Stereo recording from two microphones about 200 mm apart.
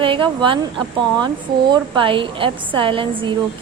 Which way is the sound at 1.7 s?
25° right (ahead or behind).